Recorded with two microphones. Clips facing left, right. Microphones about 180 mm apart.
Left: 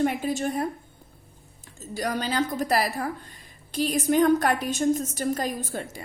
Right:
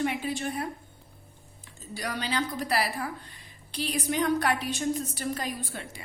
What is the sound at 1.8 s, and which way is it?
A woman's voice, 45° left (ahead or behind).